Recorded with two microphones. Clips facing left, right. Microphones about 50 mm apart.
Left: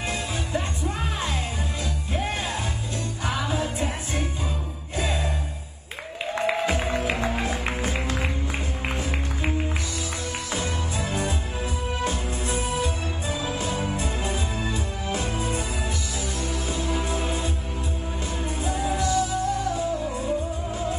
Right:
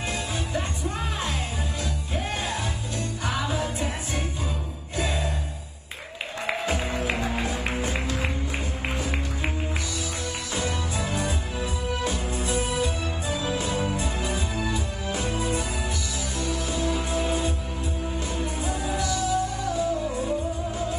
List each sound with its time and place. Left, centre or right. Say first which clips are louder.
0.1 s music: left 1 dB; left
3.4 s music: left 1 dB; left
6.5 s music: left 3 dB; left
10.5 s music: right 1 dB; left
16.4 s music: right 3 dB; left